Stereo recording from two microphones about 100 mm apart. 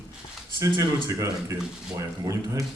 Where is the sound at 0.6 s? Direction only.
35° right (ahead or behind).